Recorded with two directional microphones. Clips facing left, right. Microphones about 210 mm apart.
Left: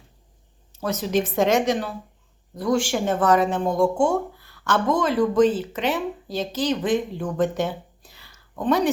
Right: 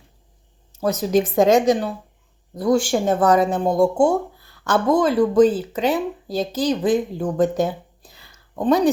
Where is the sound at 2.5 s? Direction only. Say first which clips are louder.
Right 4 dB; 35° right (ahead or behind).